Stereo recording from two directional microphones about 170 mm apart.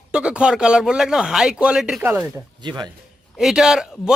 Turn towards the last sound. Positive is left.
turn(degrees=-5)  # may be behind; listen again after turning